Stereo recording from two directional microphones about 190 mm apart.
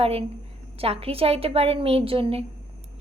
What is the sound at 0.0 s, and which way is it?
A woman's voice, 30° right (ahead or behind).